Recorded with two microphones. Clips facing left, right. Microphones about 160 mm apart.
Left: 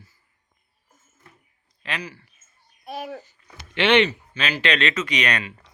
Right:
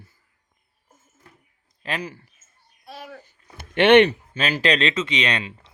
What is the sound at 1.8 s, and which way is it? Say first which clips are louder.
Speech: right 3 dB; 45° right (ahead or behind).